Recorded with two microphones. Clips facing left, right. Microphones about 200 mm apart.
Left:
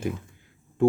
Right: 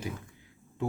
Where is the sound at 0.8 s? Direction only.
50° left (ahead or behind).